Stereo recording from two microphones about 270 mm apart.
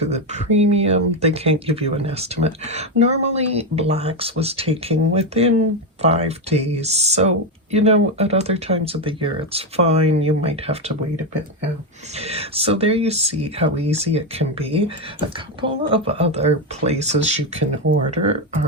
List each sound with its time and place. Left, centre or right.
0.0 s speech: right
12.1 s speech: right